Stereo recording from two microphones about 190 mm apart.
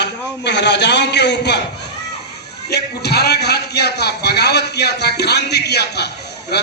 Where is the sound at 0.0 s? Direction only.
65° left (ahead or behind).